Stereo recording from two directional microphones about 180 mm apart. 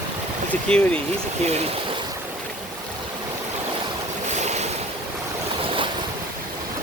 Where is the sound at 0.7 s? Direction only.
5° left (ahead or behind).